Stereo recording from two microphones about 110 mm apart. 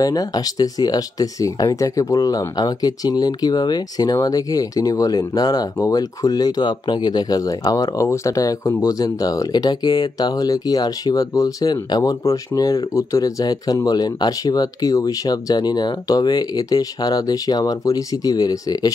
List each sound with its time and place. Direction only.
0.0 s speech: 35° left (ahead or behind)